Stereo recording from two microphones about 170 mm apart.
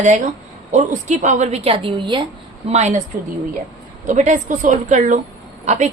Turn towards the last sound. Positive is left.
turn(degrees=-40)  # may be behind; listen again after turning